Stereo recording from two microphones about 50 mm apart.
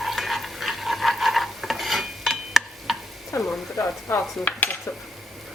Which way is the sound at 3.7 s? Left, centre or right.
Left.